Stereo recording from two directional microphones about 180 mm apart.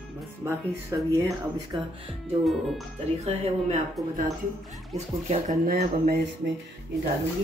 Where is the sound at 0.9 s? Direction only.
20° right (ahead or behind).